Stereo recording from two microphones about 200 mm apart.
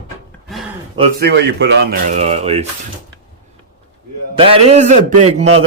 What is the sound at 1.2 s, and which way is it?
Speech, 60° right (ahead or behind).